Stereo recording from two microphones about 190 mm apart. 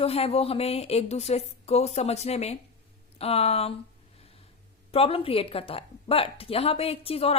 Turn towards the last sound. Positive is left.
turn(degrees=30)  # may be behind; listen again after turning